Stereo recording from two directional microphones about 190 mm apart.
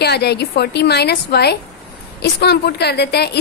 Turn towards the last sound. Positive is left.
turn(degrees=55)  # may be behind; listen again after turning